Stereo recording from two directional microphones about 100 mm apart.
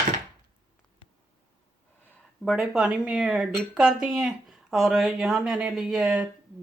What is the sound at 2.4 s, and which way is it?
Speech, centre (ahead or behind).